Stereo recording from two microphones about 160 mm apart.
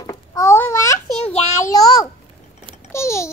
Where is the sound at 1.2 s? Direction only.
40° left (ahead or behind).